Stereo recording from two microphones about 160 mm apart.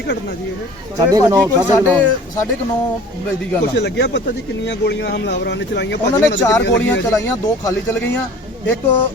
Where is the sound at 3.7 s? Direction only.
90° left.